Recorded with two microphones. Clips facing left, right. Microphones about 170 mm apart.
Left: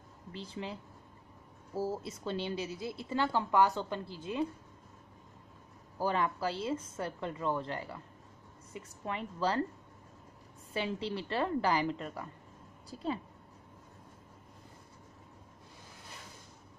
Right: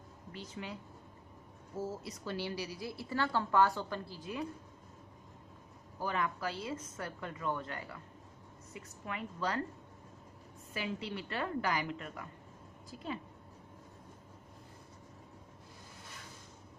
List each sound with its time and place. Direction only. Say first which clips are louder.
0.3 s a woman's voice: left 3 dB; 30° left (ahead or behind)
1.8 s a woman's voice: left 4 dB; 30° left (ahead or behind)
5.9 s a woman's voice: left 4 dB; 30° left (ahead or behind)
10.7 s a woman's voice: left 4 dB; 30° left (ahead or behind)